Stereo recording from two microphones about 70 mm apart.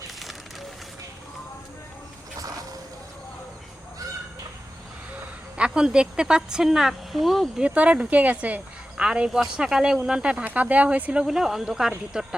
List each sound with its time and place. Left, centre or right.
5.5 s speech: centre
7.6 s speech: centre
10.3 s speech: right
11.3 s speech: centre